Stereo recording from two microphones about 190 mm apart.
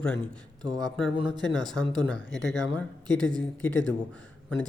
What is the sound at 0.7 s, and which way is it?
Speech, 20° right (ahead or behind).